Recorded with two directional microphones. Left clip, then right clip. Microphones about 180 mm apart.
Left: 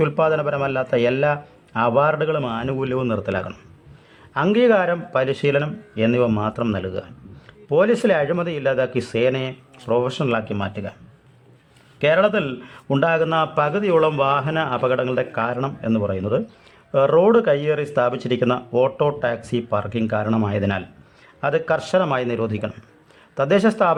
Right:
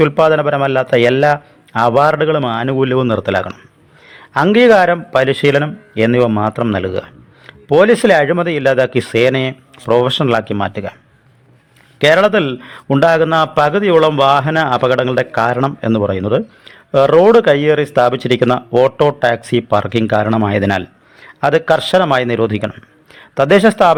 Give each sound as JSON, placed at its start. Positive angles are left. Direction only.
{"t": 0.0, "sound": "speech", "side_deg": -30}
{"t": 6.8, "sound": "speech", "side_deg": -40}
{"t": 11.9, "sound": "speech", "side_deg": -35}